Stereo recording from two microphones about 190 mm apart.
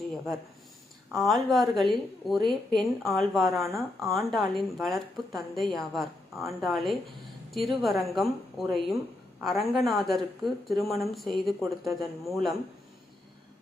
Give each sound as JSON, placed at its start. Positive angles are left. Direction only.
{"t": 1.1, "sound": "speech", "side_deg": 0}